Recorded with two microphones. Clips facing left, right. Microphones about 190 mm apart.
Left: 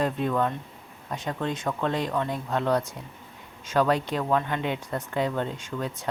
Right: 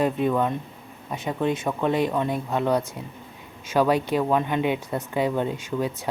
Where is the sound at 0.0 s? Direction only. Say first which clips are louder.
Right 3 dB; 5° right (ahead or behind).